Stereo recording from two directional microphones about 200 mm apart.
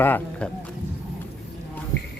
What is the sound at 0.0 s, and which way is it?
Speech, 10° left (ahead or behind).